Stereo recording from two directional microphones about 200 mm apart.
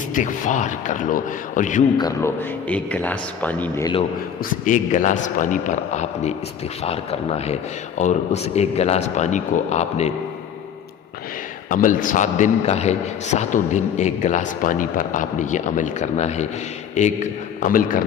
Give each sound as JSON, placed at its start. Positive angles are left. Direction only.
{"t": 0.1, "sound": "a man's voice", "side_deg": 40}
{"t": 2.0, "sound": "speech", "side_deg": 15}
{"t": 4.6, "sound": "a man's voice", "side_deg": 40}
{"t": 11.7, "sound": "a man's voice", "side_deg": 40}